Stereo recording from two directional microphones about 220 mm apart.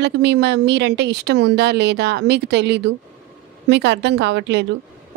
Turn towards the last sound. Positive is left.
turn(degrees=-50)  # may be behind; listen again after turning